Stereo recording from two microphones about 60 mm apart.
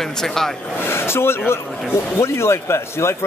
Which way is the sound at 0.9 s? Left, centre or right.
Left.